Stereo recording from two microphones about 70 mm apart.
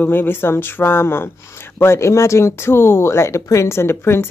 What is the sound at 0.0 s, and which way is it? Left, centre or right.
Speech, left.